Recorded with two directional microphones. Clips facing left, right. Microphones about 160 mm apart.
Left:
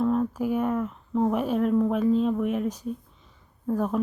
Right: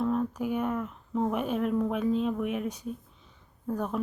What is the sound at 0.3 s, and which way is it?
Speech, centre (ahead or behind).